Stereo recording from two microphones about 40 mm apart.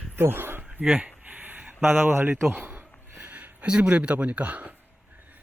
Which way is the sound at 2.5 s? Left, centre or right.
Right.